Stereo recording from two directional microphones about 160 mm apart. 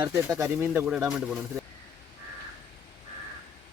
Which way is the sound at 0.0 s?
20° right (ahead or behind).